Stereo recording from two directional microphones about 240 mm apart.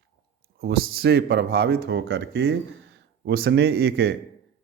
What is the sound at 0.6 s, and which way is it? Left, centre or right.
A man's voice, right.